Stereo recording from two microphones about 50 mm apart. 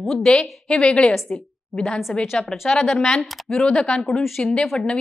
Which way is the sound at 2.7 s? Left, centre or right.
Centre.